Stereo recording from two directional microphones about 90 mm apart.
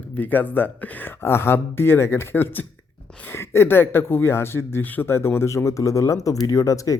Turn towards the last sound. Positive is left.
turn(degrees=35)  # may be behind; listen again after turning